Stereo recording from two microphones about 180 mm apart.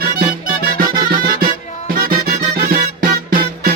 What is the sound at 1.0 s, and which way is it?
Music, 55° right (ahead or behind).